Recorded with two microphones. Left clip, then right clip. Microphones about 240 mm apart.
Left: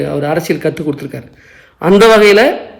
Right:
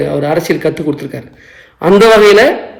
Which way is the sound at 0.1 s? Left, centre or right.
Centre.